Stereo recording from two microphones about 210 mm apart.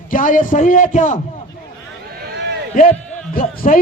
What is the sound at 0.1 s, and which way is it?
A man's voice, 40° left (ahead or behind).